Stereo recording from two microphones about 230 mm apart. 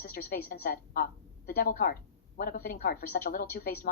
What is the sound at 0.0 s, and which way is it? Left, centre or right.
A woman's voice, left.